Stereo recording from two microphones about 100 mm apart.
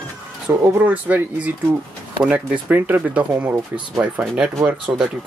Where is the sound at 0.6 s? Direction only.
25° right (ahead or behind).